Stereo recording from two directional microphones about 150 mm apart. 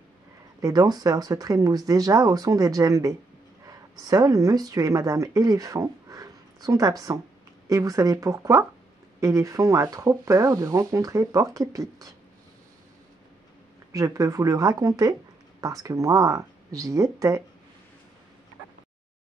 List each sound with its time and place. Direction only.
0.6 s speech: 25° right (ahead or behind)
13.9 s speech: 25° right (ahead or behind)